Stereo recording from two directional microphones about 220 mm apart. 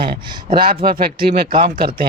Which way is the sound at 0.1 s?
40° right (ahead or behind).